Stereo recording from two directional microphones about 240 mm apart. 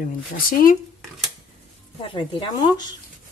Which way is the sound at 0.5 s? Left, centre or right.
Left.